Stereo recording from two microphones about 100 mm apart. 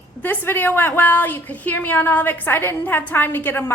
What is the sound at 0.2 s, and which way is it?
A woman's voice, 20° left (ahead or behind).